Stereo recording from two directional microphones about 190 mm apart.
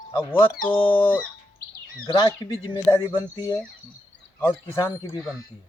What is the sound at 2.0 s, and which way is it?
Speech, 25° left (ahead or behind).